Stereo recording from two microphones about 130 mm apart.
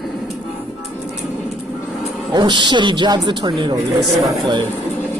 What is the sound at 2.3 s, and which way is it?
Speech, 35° right (ahead or behind).